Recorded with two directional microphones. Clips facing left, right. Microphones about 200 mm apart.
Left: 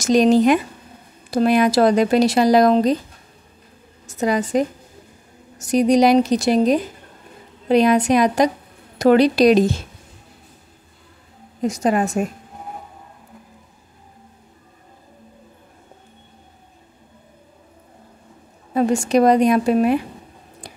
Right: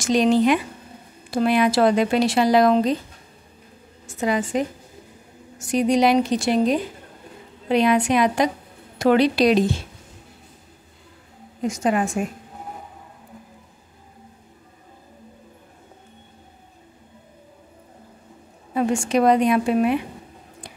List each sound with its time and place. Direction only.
0.0 s speech: 45° left (ahead or behind)
4.1 s a woman's voice: 40° left (ahead or behind)
11.6 s speech: 35° left (ahead or behind)
18.8 s speech: 40° left (ahead or behind)